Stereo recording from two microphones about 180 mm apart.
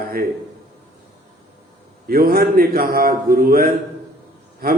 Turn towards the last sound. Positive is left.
turn(degrees=-55)  # may be behind; listen again after turning